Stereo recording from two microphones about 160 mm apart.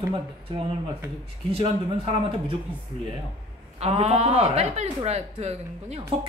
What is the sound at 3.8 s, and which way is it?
Speech, 40° right (ahead or behind).